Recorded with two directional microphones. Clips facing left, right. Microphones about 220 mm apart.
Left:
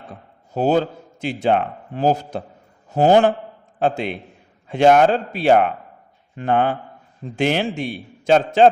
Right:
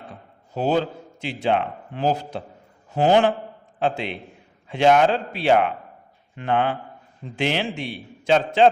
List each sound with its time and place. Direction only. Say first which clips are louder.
0.5 s a man's voice: left 4 dB; 45° left (ahead or behind)